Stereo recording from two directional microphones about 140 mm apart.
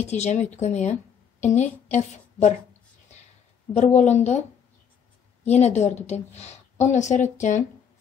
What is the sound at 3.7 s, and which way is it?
Speech, 55° left (ahead or behind).